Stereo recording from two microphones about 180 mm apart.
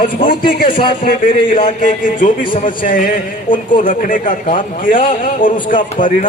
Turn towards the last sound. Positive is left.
turn(degrees=50)  # may be behind; listen again after turning